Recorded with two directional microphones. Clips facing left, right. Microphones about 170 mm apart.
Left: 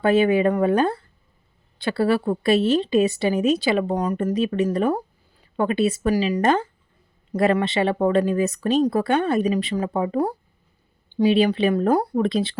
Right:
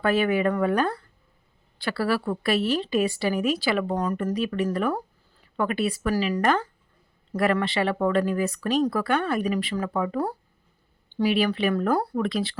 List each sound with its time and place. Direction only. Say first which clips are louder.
0.0 s a woman's voice: left 5 dB; 25° left (ahead or behind)
11.4 s speech: left 4 dB; 20° left (ahead or behind)
12.1 s a woman's voice: left 5 dB; 25° left (ahead or behind)